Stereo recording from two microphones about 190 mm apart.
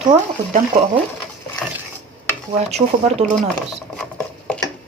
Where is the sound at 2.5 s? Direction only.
35° right (ahead or behind).